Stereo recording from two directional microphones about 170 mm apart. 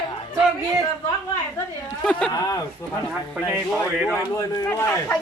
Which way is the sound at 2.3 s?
20° left (ahead or behind).